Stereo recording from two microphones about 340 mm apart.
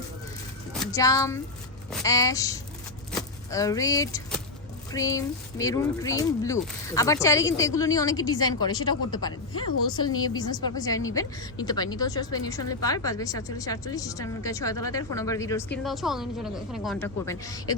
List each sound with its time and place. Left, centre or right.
0.7 s music: centre
1.9 s a woman's voice: centre
10.1 s a woman's voice: left
10.3 s a woman's voice: centre